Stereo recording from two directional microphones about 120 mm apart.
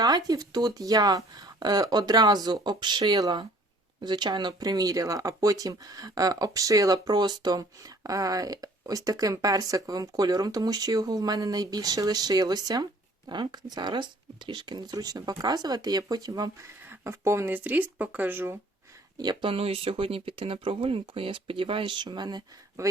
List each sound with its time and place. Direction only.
0.0 s speech: 35° right (ahead or behind); by 18.5 s 15° right (ahead or behind)
19.1 s speech: 35° right (ahead or behind)